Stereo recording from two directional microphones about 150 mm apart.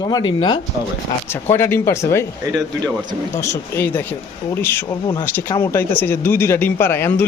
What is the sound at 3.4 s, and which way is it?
Speech, 20° left (ahead or behind).